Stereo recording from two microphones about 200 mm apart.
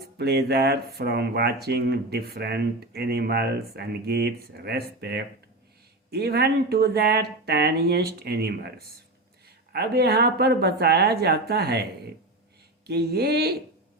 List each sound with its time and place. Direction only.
0.2 s speech: 55° right (ahead or behind)